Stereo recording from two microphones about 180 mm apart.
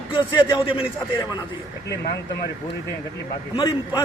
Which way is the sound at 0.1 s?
30° left (ahead or behind).